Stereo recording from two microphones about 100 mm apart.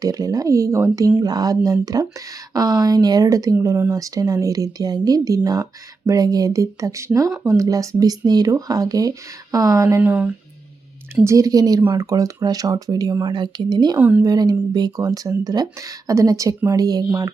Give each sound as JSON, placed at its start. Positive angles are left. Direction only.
{"t": 0.0, "sound": "speech", "side_deg": -40}
{"t": 10.0, "sound": "speech", "side_deg": -15}
{"t": 11.3, "sound": "speech", "side_deg": -35}